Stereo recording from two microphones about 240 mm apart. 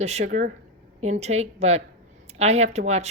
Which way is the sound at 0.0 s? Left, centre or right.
Right.